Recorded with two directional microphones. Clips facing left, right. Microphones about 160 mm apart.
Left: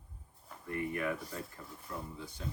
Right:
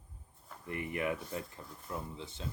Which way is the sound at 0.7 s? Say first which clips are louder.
Even; 20° right (ahead or behind).